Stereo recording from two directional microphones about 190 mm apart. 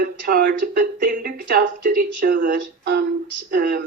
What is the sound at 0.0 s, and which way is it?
Speech, 50° right (ahead or behind).